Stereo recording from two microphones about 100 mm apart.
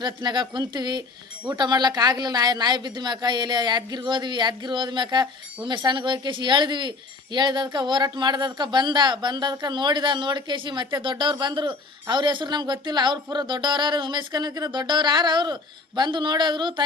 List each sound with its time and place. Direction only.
0.0 s speech: 50° right (ahead or behind)